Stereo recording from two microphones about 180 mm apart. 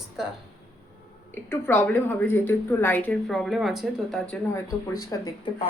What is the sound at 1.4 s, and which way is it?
Speech, 10° left (ahead or behind).